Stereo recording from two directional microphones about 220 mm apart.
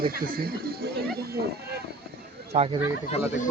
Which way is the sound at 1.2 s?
45° right (ahead or behind).